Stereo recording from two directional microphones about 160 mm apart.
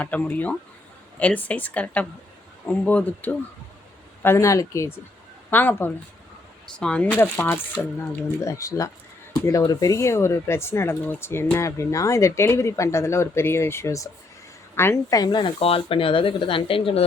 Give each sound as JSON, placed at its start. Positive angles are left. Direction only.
{"t": 0.0, "sound": "speech", "side_deg": 10}